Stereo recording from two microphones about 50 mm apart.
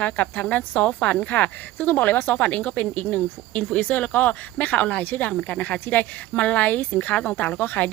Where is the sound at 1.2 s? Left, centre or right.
Left.